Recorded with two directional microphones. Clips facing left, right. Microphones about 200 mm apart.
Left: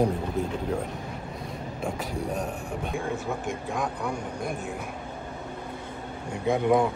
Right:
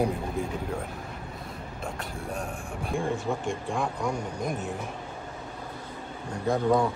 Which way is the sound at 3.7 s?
5° left (ahead or behind).